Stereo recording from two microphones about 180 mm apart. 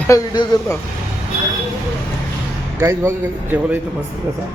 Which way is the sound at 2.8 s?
15° right (ahead or behind).